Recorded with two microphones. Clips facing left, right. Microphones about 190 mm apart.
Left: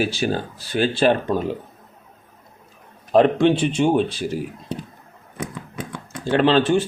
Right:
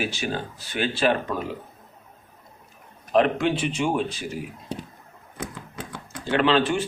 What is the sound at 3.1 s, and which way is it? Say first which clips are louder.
Speech: left 5 dB; 30° left (ahead or behind).